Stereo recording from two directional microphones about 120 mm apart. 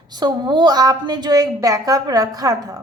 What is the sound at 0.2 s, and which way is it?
A woman's voice, 35° right (ahead or behind).